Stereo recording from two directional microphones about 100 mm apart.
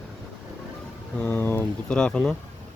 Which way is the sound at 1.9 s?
10° left (ahead or behind).